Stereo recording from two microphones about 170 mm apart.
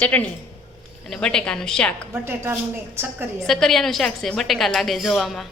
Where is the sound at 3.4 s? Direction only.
Centre (ahead or behind).